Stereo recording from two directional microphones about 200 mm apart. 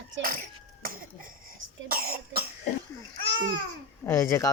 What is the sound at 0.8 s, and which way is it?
Cough, 45° right (ahead or behind).